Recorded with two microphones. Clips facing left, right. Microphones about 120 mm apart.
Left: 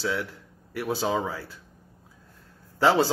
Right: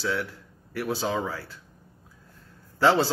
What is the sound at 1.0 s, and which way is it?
Speech, 25° left (ahead or behind).